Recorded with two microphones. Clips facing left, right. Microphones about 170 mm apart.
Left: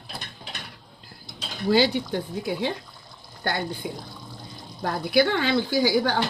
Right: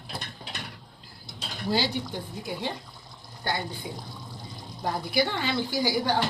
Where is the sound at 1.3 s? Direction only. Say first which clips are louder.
Left 6 dB; 65° left (ahead or behind).